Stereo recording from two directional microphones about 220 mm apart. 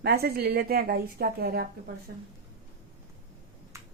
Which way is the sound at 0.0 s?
45° right (ahead or behind).